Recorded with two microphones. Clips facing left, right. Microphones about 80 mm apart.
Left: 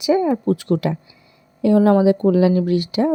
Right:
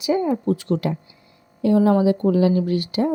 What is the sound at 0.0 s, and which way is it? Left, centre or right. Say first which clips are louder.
Speech: left 3 dB; left.